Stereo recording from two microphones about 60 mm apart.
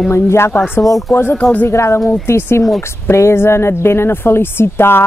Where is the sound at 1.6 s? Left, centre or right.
Left.